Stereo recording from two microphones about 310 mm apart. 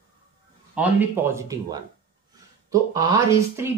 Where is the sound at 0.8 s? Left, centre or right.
Centre.